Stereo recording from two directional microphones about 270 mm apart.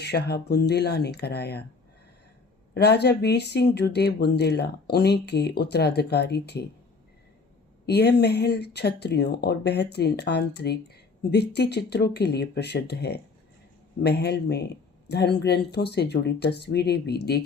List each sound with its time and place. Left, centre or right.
0.0 s speech: left
2.7 s speech: left
7.9 s speech: left